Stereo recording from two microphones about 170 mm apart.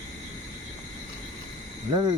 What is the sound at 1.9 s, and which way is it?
Speech, 25° right (ahead or behind).